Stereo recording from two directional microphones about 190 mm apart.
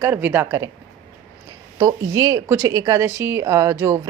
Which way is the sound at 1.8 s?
15° right (ahead or behind).